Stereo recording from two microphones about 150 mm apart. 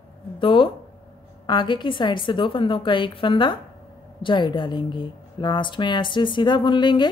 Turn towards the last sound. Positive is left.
turn(degrees=30)  # may be behind; listen again after turning